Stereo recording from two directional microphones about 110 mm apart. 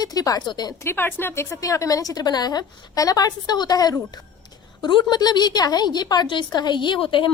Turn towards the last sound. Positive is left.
turn(degrees=50)  # may be behind; listen again after turning